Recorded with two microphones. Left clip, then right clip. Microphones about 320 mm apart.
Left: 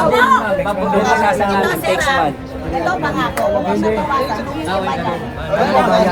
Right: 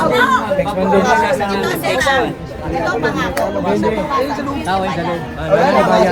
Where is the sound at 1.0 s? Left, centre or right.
Centre.